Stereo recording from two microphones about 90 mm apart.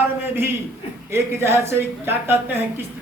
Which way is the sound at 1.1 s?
25° right (ahead or behind).